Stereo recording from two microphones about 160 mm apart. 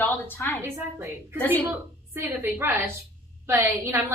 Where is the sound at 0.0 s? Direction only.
15° left (ahead or behind).